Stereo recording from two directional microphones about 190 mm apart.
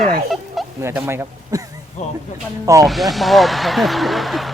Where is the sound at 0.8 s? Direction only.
15° right (ahead or behind).